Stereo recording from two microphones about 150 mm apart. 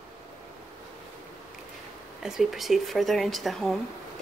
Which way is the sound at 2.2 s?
Centre (ahead or behind).